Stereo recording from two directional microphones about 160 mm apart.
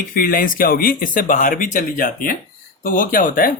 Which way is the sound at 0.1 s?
65° left (ahead or behind).